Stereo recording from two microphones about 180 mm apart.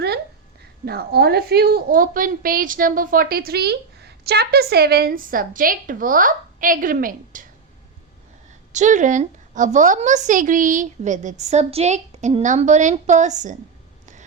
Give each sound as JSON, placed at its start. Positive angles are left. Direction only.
{"t": 0.9, "sound": "a woman's voice", "side_deg": -60}
{"t": 8.7, "sound": "a woman's voice", "side_deg": -45}